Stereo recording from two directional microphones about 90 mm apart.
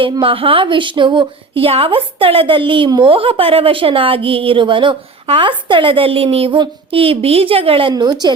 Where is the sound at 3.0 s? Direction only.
85° right.